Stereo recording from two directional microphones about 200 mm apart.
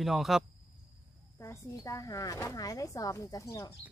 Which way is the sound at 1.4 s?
15° left (ahead or behind).